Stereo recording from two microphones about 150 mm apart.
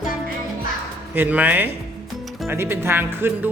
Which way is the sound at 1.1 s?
10° right (ahead or behind).